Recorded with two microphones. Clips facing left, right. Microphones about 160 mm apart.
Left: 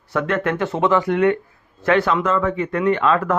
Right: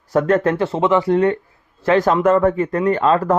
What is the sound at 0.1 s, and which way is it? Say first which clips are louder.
A man's voice: right 5 dB; 40° right (ahead or behind).